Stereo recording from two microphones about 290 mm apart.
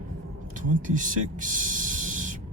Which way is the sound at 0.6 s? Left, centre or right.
Right.